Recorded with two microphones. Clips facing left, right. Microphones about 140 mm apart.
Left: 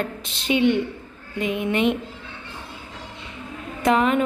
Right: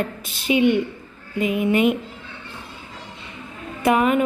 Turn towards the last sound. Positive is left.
turn(degrees=-10)  # may be behind; listen again after turning